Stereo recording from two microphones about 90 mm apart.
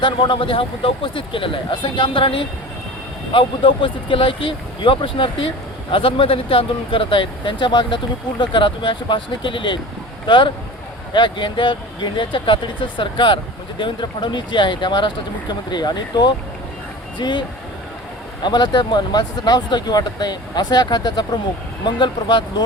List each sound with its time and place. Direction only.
0.0 s a man's voice: 70° left (ahead or behind); by 2.5 s 85° left
3.3 s a man's voice: 70° left (ahead or behind)
18.4 s speech: 55° left (ahead or behind)